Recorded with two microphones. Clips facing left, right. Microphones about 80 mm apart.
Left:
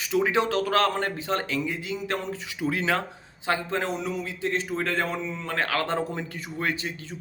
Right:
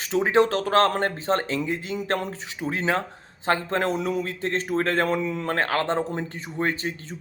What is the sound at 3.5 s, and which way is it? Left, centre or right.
A man's voice, right.